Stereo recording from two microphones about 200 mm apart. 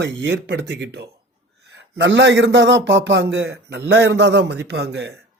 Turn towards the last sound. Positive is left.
turn(degrees=-55)  # may be behind; listen again after turning